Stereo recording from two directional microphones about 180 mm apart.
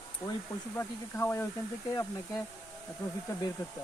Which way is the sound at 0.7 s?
15° left (ahead or behind).